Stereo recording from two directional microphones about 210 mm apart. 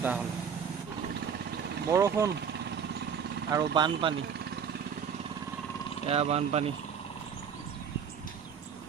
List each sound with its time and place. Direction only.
0.0 s speech: 5° right (ahead or behind)
1.9 s speech: 15° right (ahead or behind)
3.5 s speech: 20° right (ahead or behind)
6.1 s speech: 30° right (ahead or behind)